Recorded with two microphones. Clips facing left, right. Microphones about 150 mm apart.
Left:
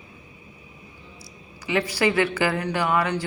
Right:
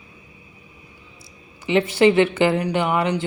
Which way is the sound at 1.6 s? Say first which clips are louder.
Right 7 dB; 25° right (ahead or behind).